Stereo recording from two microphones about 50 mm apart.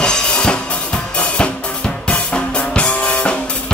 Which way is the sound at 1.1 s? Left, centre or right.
Left.